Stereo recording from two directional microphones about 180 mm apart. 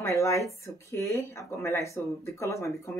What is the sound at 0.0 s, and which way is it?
Speech, 15° left (ahead or behind).